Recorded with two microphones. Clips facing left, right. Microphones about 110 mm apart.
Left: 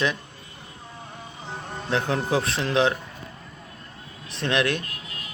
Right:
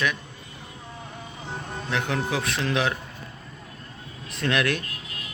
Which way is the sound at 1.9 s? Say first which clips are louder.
Left 3 dB; 35° left (ahead or behind).